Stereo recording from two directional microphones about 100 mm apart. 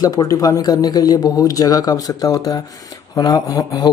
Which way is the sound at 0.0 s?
40° left (ahead or behind).